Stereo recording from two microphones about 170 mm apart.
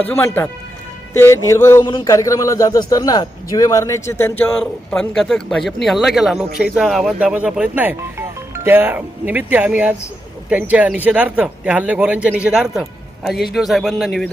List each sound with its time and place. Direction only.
0.1 s speech: 15° left (ahead or behind)
1.8 s a man's voice: 30° left (ahead or behind)
4.6 s speech: 5° left (ahead or behind)